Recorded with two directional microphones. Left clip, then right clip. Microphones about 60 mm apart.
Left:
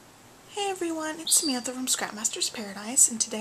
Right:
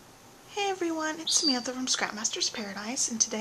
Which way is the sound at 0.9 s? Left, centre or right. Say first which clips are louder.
Even; centre.